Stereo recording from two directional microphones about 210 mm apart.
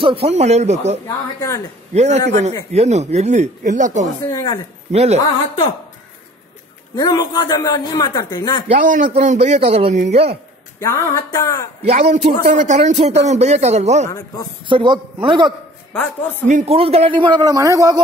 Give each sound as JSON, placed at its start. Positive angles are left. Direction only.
{"t": 0.0, "sound": "a man's voice", "side_deg": -25}
{"t": 2.0, "sound": "a man's voice", "side_deg": -35}
{"t": 4.3, "sound": "a sound", "side_deg": 15}
{"t": 4.9, "sound": "a man's voice", "side_deg": -30}
{"t": 7.0, "sound": "a man's voice", "side_deg": 20}
{"t": 8.6, "sound": "a man's voice", "side_deg": -35}
{"t": 10.8, "sound": "a sound", "side_deg": 15}
{"t": 11.8, "sound": "a man's voice", "side_deg": -30}
{"t": 14.1, "sound": "a sound", "side_deg": 15}
{"t": 14.7, "sound": "a man's voice", "side_deg": -25}
{"t": 15.9, "sound": "a sound", "side_deg": 10}
{"t": 16.4, "sound": "a man's voice", "side_deg": -30}